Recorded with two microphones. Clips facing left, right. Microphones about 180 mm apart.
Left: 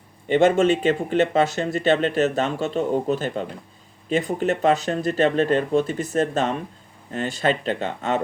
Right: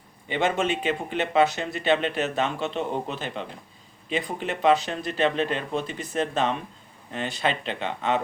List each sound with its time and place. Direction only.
0.3 s speech: 45° left (ahead or behind)